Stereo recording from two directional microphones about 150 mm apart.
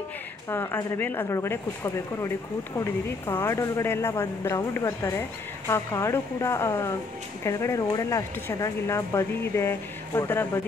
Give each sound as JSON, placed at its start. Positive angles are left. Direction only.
{"t": 0.5, "sound": "speech", "side_deg": 15}